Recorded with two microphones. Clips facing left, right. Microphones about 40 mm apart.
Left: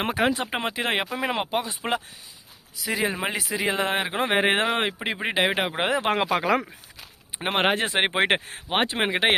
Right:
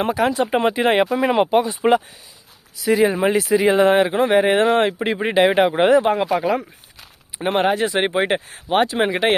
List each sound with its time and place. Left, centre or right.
0.0 s speech: left
0.6 s speech: centre
4.2 s speech: left
4.7 s speech: centre
6.3 s speech: left
7.3 s speech: left
8.8 s speech: left